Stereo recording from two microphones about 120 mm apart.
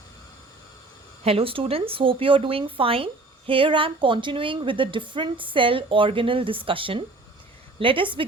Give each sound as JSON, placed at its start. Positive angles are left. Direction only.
{"t": 1.2, "sound": "speech", "side_deg": -55}